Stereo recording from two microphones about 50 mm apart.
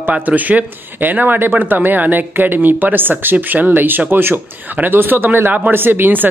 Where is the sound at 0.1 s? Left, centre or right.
Right.